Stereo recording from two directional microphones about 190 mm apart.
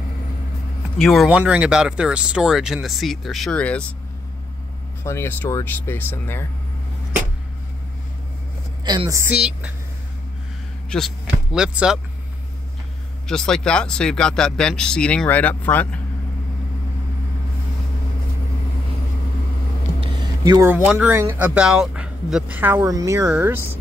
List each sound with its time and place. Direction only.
0.9 s speech: centre (ahead or behind)
5.0 s speech: 15° left (ahead or behind)
8.8 s a woman's voice: 25° right (ahead or behind)
9.2 s speech: 5° right (ahead or behind)
10.9 s speech: centre (ahead or behind)
13.3 s speech: 5° left (ahead or behind)
20.0 s music: 20° right (ahead or behind)
20.7 s speech: 5° right (ahead or behind)